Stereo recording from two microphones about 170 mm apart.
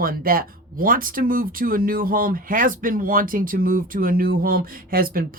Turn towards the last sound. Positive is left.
turn(degrees=-60)  # may be behind; listen again after turning